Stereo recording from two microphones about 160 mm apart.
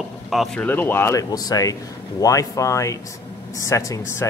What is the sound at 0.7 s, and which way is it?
Speech, 10° left (ahead or behind).